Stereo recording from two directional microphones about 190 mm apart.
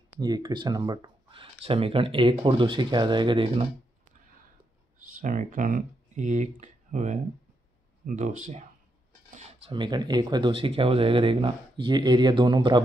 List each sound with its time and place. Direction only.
0.2 s speech: 20° right (ahead or behind)
4.9 s speech: 40° right (ahead or behind)
9.7 s speech: 25° right (ahead or behind)